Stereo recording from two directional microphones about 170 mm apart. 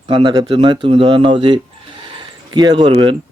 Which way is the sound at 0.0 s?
30° right (ahead or behind).